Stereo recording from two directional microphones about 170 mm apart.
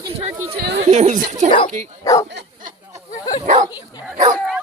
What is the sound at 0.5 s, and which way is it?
Chatter, 70° right (ahead or behind).